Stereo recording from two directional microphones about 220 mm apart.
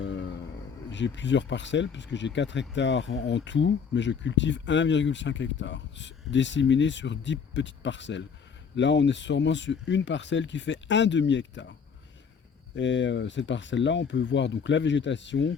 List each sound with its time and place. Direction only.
0.0 s a sound: 55° left (ahead or behind)
0.9 s speech: 55° left (ahead or behind)
12.7 s speech: 55° left (ahead or behind)